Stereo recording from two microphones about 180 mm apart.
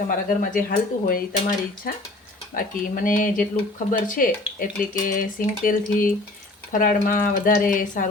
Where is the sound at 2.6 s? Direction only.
50° left (ahead or behind).